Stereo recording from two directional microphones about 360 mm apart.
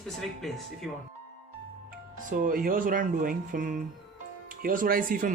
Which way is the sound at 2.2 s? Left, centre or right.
Right.